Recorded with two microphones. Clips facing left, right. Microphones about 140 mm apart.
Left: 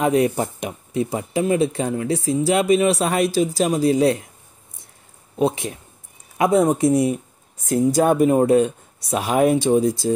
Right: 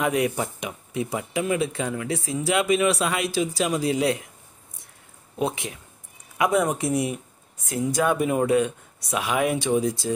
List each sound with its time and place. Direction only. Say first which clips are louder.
0.0 s speech: left 5 dB; 30° left (ahead or behind)
5.4 s speech: left 6 dB; 35° left (ahead or behind)